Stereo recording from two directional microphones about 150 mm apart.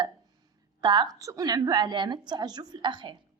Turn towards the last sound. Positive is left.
turn(degrees=-30)  # may be behind; listen again after turning